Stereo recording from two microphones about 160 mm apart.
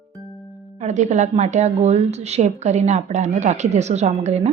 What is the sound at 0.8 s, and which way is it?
A woman's voice, 45° right (ahead or behind).